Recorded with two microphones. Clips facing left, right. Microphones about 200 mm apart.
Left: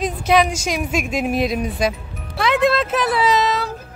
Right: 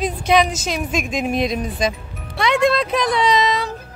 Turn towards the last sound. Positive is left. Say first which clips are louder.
# even
turn(degrees=5)  # may be behind; listen again after turning